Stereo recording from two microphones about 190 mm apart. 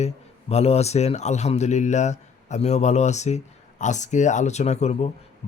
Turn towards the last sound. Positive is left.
turn(degrees=35)  # may be behind; listen again after turning